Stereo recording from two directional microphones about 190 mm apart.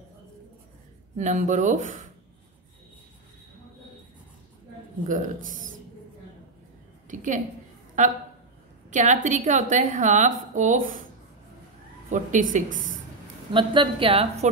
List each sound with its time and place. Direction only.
1.1 s a woman's voice: 40° right (ahead or behind)
5.0 s a woman's voice: 40° right (ahead or behind)
7.1 s a sound: 40° right (ahead or behind)
8.0 s a woman's voice: 40° right (ahead or behind)
12.1 s a woman's voice: 40° right (ahead or behind)
13.5 s a woman's voice: 25° right (ahead or behind)